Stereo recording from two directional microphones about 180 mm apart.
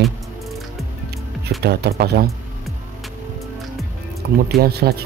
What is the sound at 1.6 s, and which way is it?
Speech, 65° right (ahead or behind).